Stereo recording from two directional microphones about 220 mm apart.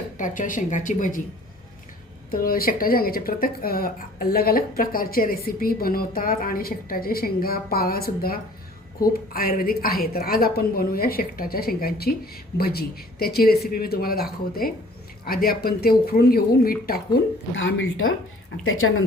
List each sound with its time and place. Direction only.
0.2 s speech: 35° left (ahead or behind)
2.3 s a woman's voice: 40° left (ahead or behind)
17.5 s a woman's voice: 60° left (ahead or behind)